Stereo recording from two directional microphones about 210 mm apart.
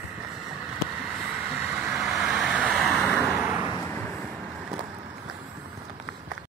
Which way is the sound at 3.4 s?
10° right (ahead or behind).